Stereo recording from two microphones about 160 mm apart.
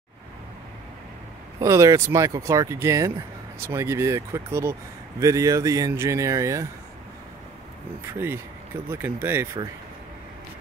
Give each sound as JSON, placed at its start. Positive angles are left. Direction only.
{"t": 1.6, "sound": "speech", "side_deg": -20}
{"t": 8.1, "sound": "speech", "side_deg": -15}